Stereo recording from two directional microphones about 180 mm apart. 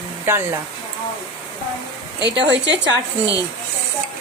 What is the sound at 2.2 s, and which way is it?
Speech, 75° right (ahead or behind).